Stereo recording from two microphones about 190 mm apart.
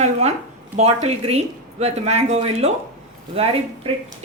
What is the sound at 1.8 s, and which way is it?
Speech, 35° right (ahead or behind).